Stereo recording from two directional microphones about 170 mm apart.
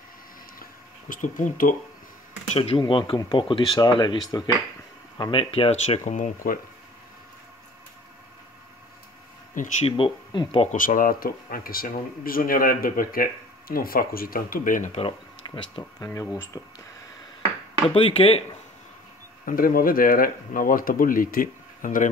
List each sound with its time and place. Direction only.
0.6 s a sound: 50° left (ahead or behind)
2.5 s speech: 35° left (ahead or behind); by 6.6 s 50° left (ahead or behind)
9.8 s speech: 30° left (ahead or behind)
10.7 s speech: 50° left (ahead or behind)
15.0 s speech: 30° left (ahead or behind)
16.1 s speech: 15° left (ahead or behind)
17.8 s speech: 35° left (ahead or behind)
19.4 s speech: 55° left (ahead or behind)